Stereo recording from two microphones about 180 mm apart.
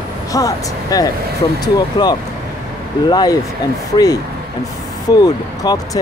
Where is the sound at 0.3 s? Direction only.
20° left (ahead or behind).